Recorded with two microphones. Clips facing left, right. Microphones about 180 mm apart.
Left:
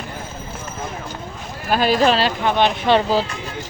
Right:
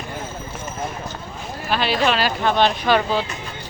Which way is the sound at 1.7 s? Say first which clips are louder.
Left 4 dB; 45° left (ahead or behind).